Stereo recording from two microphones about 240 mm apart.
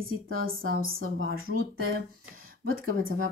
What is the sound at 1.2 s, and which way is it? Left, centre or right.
Speech, right.